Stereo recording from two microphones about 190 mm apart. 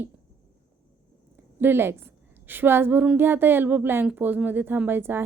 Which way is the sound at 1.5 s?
10° right (ahead or behind).